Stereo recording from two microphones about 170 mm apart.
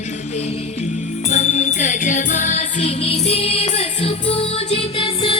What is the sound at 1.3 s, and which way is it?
Music, 45° left (ahead or behind).